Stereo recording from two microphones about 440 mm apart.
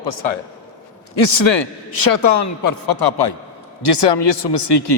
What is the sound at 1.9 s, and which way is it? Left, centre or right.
A man's voice, left.